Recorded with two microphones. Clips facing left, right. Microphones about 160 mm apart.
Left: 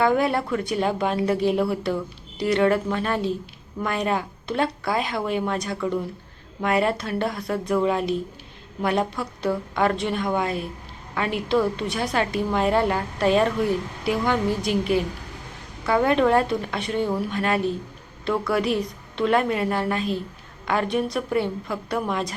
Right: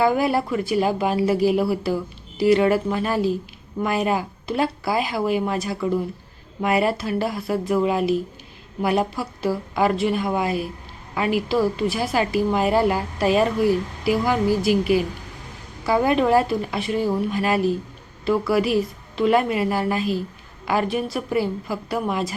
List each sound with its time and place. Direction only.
0.0 s a woman's voice: 5° right (ahead or behind)